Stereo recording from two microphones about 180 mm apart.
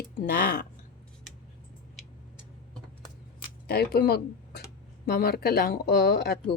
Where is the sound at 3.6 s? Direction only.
60° left (ahead or behind).